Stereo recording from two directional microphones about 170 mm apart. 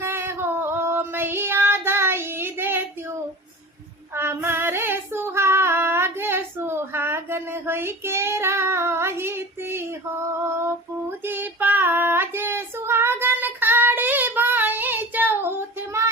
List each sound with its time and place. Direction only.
0.0 s female singing: 15° right (ahead or behind)
4.1 s female singing: 15° right (ahead or behind)
11.3 s child singing: 10° right (ahead or behind)